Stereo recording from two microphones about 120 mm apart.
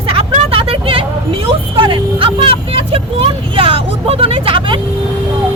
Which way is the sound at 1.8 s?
45° right (ahead or behind).